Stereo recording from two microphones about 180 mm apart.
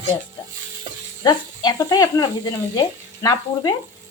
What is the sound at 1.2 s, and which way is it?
A woman's voice, 20° left (ahead or behind).